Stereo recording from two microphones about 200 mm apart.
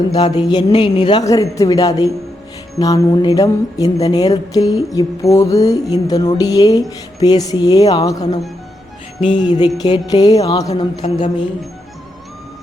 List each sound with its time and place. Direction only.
0.1 s speech: 20° left (ahead or behind)